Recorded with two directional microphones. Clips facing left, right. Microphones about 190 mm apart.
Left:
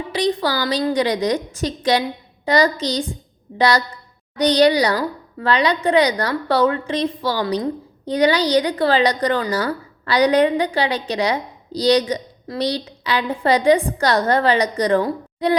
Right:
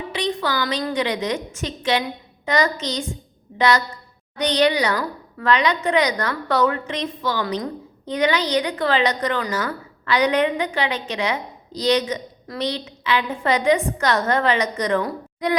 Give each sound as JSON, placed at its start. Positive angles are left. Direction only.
{"t": 0.1, "sound": "a woman's voice", "side_deg": 35}